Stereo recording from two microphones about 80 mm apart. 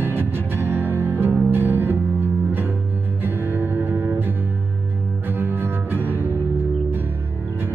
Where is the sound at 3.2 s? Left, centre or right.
Right.